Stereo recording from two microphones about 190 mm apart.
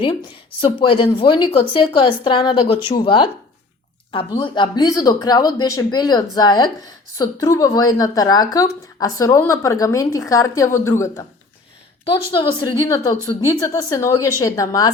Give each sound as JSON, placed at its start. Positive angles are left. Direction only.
{"t": 0.0, "sound": "a woman's voice", "side_deg": 25}
{"t": 12.0, "sound": "a woman's voice", "side_deg": 25}